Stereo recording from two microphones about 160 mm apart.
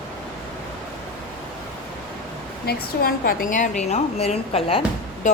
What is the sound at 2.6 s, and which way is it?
A woman's voice, 70° left (ahead or behind).